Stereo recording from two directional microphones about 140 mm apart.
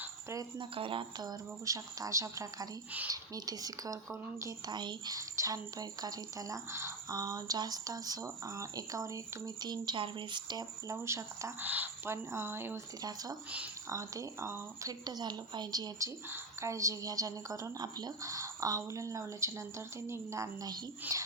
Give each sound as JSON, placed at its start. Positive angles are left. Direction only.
{"t": 0.0, "sound": "a sound", "side_deg": -20}
{"t": 0.6, "sound": "a woman's voice", "side_deg": -40}
{"t": 10.9, "sound": "a woman's voice", "side_deg": -20}